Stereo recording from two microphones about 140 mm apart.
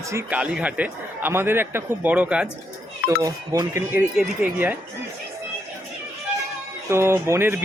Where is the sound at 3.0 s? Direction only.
25° right (ahead or behind).